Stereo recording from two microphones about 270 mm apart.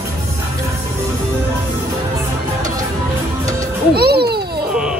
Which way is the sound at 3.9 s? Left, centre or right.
Right.